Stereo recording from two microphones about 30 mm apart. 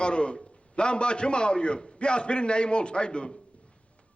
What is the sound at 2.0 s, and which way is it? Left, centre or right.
A man's voice, left.